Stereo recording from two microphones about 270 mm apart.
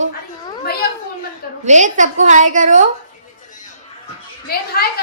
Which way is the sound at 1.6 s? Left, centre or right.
Right.